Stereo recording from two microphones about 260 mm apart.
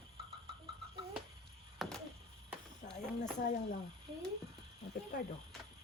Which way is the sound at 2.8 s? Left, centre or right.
Left.